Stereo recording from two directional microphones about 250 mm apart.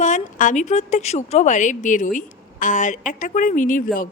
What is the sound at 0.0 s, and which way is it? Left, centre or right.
A woman's voice, left.